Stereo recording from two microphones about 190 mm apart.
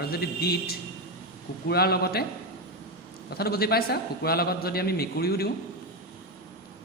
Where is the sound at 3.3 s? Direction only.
55° left (ahead or behind).